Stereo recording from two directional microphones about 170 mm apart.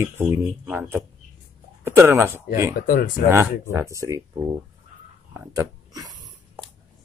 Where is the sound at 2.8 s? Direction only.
55° left (ahead or behind).